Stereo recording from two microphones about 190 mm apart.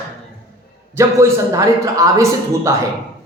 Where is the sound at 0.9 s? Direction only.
15° right (ahead or behind).